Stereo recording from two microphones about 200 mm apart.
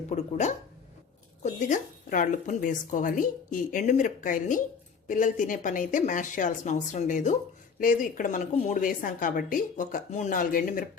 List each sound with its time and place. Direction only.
0.1 s a woman's voice: 35° left (ahead or behind)